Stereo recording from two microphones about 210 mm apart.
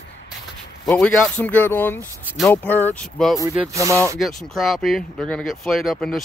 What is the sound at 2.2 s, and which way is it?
Speech, centre (ahead or behind).